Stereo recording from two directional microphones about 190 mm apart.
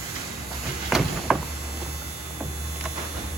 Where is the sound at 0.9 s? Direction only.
Centre (ahead or behind).